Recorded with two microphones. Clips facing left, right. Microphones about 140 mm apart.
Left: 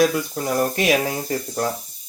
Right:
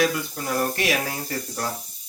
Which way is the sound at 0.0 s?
50° left (ahead or behind).